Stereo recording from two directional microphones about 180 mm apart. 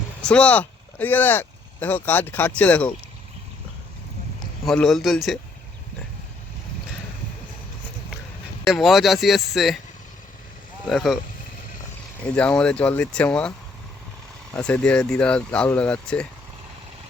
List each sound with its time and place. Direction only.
0.2 s speech: 5° left (ahead or behind)
4.6 s speech: centre (ahead or behind)
8.6 s speech: centre (ahead or behind)
10.8 s speech: centre (ahead or behind)
12.2 s speech: 5° left (ahead or behind)
14.6 s speech: 5° left (ahead or behind)